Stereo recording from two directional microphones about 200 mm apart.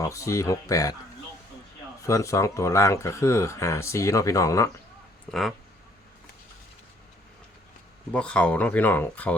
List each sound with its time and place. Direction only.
0.0 s speech: 15° left (ahead or behind)
2.0 s speech: 15° left (ahead or behind)
5.3 s speech: centre (ahead or behind)
8.1 s speech: 5° left (ahead or behind)